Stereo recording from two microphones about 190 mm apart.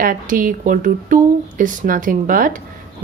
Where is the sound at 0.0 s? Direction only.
45° right (ahead or behind).